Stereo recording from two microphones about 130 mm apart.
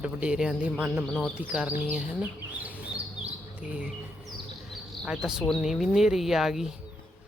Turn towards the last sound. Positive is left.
turn(degrees=0)  # may be behind; listen again after turning